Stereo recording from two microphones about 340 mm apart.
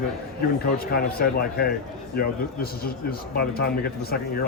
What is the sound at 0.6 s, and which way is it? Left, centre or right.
A man's voice, left.